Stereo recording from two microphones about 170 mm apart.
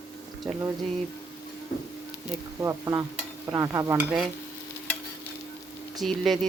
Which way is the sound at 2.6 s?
20° right (ahead or behind).